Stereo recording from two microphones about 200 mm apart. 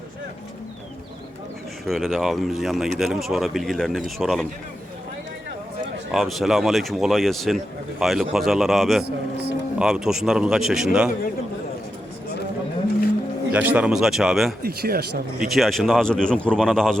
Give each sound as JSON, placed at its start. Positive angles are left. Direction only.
{"t": 1.9, "sound": "speech", "side_deg": 0}
{"t": 6.1, "sound": "speech", "side_deg": 0}
{"t": 9.0, "sound": "speech", "side_deg": -55}
{"t": 9.7, "sound": "speech", "side_deg": -5}
{"t": 13.5, "sound": "speech", "side_deg": -5}
{"t": 14.6, "sound": "speech", "side_deg": -50}
{"t": 15.4, "sound": "speech", "side_deg": 0}